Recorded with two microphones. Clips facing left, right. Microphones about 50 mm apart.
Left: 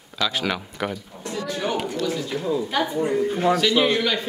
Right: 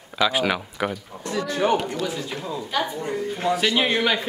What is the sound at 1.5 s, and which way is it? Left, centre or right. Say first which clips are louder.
Speech: right 5 dB; right.